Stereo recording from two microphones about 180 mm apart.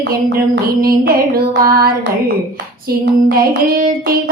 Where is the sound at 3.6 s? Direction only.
50° right (ahead or behind).